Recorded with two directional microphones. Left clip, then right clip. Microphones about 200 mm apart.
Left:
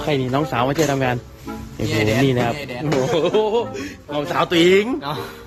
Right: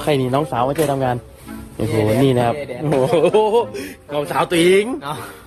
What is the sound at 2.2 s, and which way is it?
Speech, 30° right (ahead or behind).